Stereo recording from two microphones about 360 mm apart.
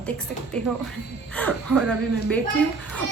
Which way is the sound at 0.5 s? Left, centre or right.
Centre.